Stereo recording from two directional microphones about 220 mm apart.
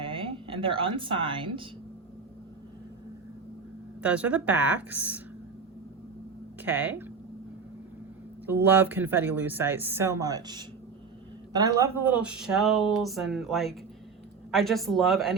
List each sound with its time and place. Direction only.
0.1 s a sound: 25° right (ahead or behind)
4.0 s speech: 5° right (ahead or behind)
6.6 s speech: 10° right (ahead or behind)
8.6 s speech: 10° right (ahead or behind)